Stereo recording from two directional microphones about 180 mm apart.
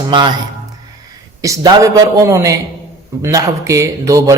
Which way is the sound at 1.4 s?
20° right (ahead or behind).